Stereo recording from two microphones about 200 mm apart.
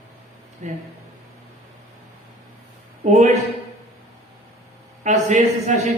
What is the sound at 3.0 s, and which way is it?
Speech, 35° right (ahead or behind).